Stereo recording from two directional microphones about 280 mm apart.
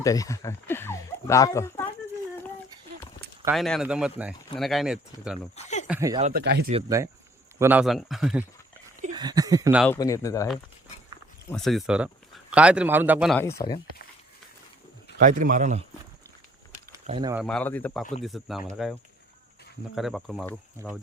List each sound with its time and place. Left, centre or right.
0.0 s speech: centre
3.4 s speech: centre
5.5 s a sound: left
5.9 s speech: centre
6.1 s speech: right
6.4 s speech: right
6.7 s speech: centre
9.0 s speech: centre
9.8 s speech: centre
13.4 s speech: centre
15.2 s speech: right
17.1 s speech: centre
17.3 s speech: centre
20.0 s speech: centre